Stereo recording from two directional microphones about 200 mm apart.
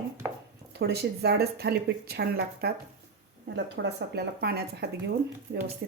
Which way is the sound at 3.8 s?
65° right (ahead or behind).